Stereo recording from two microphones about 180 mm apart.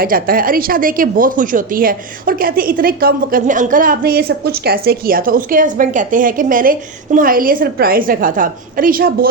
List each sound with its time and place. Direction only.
0.0 s speech: 55° right (ahead or behind)